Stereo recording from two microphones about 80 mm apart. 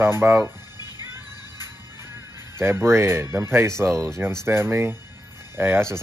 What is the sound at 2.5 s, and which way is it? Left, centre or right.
Speech, right.